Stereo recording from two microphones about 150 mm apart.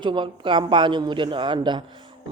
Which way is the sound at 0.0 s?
30° right (ahead or behind).